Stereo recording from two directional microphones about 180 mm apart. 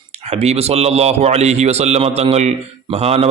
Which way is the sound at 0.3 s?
35° right (ahead or behind).